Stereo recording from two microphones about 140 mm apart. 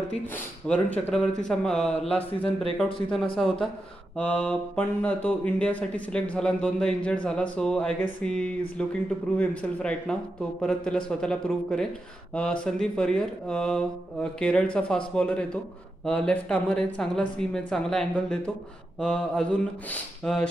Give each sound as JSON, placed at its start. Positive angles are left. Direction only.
{"t": 0.7, "sound": "speech", "side_deg": 10}